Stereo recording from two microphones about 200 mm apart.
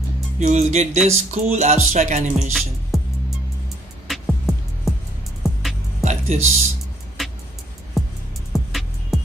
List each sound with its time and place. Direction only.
0.4 s speech: 35° right (ahead or behind)
2.9 s music: centre (ahead or behind)
4.1 s music: centre (ahead or behind)
6.0 s speech: 35° right (ahead or behind)
7.2 s music: centre (ahead or behind)